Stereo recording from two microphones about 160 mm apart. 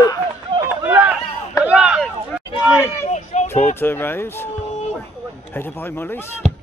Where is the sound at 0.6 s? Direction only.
15° right (ahead or behind).